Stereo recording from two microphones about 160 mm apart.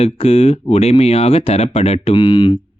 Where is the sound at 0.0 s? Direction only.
40° left (ahead or behind).